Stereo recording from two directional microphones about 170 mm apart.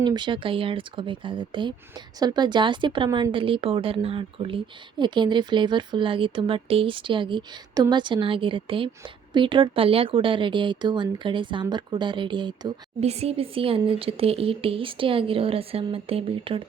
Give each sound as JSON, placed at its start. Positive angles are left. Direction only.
{"t": 0.0, "sound": "speech", "side_deg": -25}
{"t": 13.1, "sound": "speech", "side_deg": -40}